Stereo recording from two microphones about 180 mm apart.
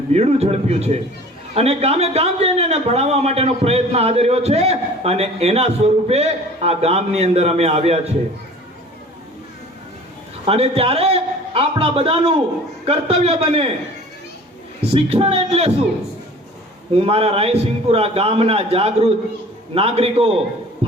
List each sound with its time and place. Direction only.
0.1 s a man's voice: 35° right (ahead or behind)
10.4 s a man's voice: 35° right (ahead or behind)
14.8 s a man's voice: 35° right (ahead or behind)
16.9 s a man's voice: 35° right (ahead or behind)